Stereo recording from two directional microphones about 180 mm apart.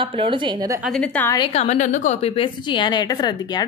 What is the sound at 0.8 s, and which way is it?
Speech, 5° left (ahead or behind).